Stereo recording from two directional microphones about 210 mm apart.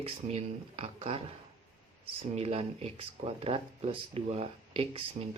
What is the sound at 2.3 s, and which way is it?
Speech, 30° right (ahead or behind).